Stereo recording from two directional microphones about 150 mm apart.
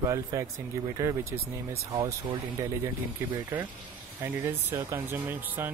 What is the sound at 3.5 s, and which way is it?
Speech, 15° right (ahead or behind).